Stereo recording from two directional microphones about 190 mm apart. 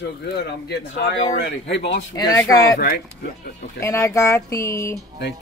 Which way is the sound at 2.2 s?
20° left (ahead or behind).